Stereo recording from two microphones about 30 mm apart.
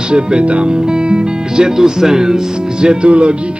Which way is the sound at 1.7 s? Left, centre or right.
Centre.